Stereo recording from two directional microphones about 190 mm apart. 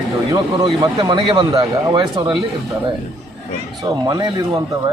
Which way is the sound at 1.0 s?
25° right (ahead or behind).